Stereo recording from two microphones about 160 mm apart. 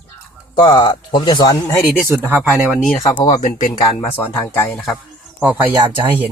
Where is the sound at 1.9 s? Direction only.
15° right (ahead or behind).